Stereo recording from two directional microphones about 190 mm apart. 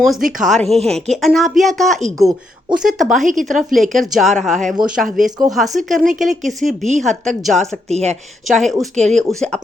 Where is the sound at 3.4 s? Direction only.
Centre (ahead or behind).